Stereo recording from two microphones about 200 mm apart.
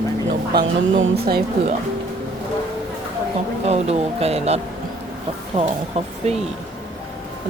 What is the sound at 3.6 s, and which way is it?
Speech, 30° right (ahead or behind).